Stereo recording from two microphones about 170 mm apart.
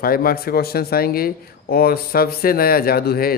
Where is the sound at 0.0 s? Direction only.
60° left (ahead or behind).